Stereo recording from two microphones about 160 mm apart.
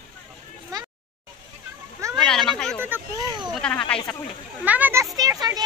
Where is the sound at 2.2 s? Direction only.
5° left (ahead or behind).